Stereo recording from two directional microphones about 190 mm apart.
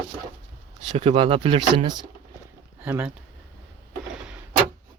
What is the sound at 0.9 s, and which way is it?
Speech, 30° right (ahead or behind).